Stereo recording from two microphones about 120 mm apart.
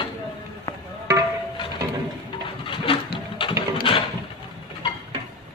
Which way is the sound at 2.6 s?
45° left (ahead or behind).